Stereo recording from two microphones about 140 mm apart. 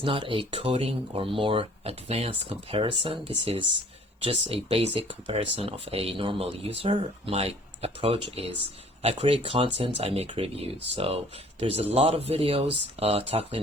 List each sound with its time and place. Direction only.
0.0 s speech: 40° right (ahead or behind)